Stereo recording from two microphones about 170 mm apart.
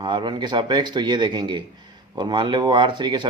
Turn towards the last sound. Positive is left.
turn(degrees=-25)  # may be behind; listen again after turning